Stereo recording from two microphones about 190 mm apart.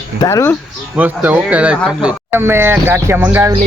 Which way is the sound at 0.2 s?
15° left (ahead or behind).